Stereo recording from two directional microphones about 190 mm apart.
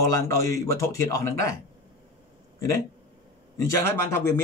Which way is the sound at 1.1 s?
15° left (ahead or behind).